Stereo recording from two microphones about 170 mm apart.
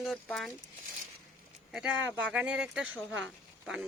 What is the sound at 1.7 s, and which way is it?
Speech, 5° right (ahead or behind).